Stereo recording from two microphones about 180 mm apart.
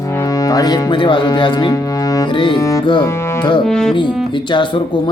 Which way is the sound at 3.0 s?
15° left (ahead or behind).